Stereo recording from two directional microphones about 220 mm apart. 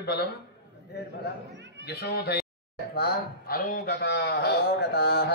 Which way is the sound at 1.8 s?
50° left (ahead or behind).